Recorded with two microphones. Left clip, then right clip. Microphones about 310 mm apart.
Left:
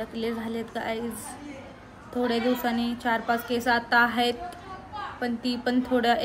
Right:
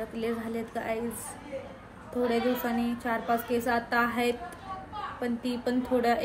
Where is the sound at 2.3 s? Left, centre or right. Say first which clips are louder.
Left 3 dB; centre.